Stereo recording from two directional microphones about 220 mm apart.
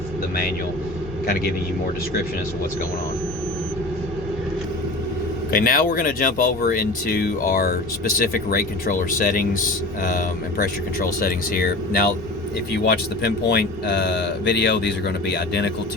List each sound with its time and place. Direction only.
5.5 s speech: 40° left (ahead or behind)